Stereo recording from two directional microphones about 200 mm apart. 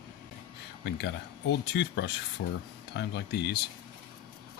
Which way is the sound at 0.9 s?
55° left (ahead or behind).